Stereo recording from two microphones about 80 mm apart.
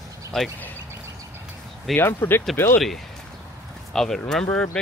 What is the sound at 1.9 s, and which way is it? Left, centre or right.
Speech, left.